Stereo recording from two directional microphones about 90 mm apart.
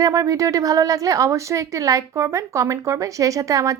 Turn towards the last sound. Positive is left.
turn(degrees=-40)  # may be behind; listen again after turning